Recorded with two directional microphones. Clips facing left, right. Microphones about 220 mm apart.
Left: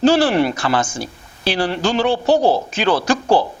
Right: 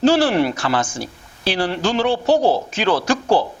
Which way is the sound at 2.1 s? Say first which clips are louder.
Left 1 dB; 40° left (ahead or behind).